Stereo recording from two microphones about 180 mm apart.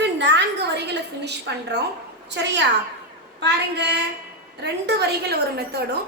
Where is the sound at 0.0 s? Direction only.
75° right (ahead or behind).